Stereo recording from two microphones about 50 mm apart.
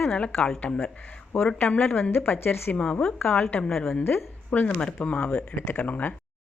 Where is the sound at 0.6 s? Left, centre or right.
Left.